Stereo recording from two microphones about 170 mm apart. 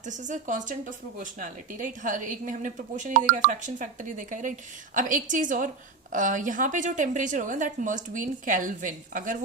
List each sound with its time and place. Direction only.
0.0 s a woman's voice: 45° right (ahead or behind)